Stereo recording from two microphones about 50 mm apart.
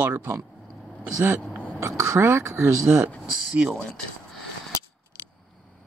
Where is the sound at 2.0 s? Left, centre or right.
Right.